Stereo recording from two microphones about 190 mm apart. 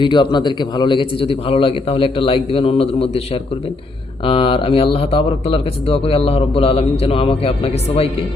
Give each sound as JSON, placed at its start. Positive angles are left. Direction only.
{"t": 0.0, "sound": "a man's voice", "side_deg": 25}
{"t": 4.3, "sound": "speech", "side_deg": 30}